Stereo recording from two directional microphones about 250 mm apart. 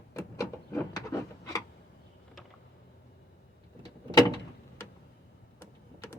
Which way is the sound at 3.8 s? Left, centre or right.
Centre.